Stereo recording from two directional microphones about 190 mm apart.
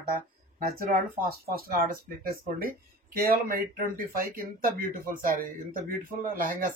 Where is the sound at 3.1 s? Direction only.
50° right (ahead or behind).